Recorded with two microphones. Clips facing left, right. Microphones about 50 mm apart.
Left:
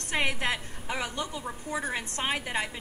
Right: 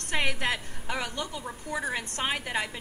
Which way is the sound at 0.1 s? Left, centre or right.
Left.